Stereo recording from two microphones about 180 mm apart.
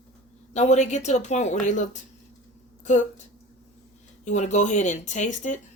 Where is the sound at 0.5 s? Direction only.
40° left (ahead or behind).